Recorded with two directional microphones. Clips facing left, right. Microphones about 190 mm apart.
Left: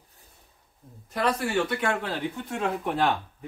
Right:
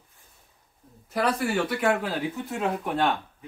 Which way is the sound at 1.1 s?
5° right (ahead or behind).